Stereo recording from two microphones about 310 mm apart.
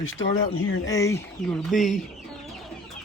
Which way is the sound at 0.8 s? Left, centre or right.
Centre.